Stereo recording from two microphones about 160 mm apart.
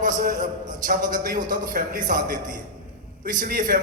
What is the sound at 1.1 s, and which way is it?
A man's voice, 60° right (ahead or behind).